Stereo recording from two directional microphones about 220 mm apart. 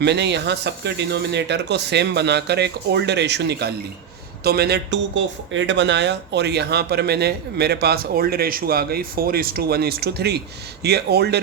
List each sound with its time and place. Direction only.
0.0 s speech: 50° right (ahead or behind)